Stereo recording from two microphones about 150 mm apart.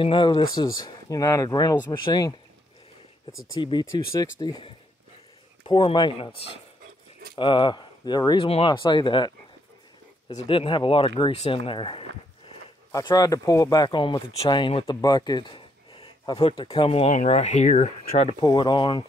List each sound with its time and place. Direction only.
0.0 s speech: 35° left (ahead or behind)
3.5 s speech: 30° left (ahead or behind)
5.9 s speech: 35° left (ahead or behind)
12.9 s speech: 25° left (ahead or behind)
15.0 s a sound: 25° left (ahead or behind)
16.6 s speech: 30° left (ahead or behind)
16.9 s speech: 50° left (ahead or behind)
18.4 s speech: 30° left (ahead or behind)